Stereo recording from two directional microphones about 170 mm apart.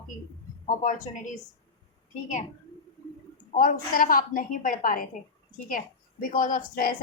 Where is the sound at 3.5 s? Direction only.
50° left (ahead or behind).